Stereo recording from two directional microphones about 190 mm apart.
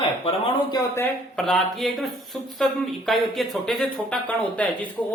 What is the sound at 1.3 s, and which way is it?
Speech, 5° left (ahead or behind).